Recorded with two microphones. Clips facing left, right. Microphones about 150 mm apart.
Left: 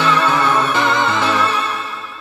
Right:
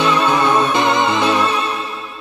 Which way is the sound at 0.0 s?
15° right (ahead or behind).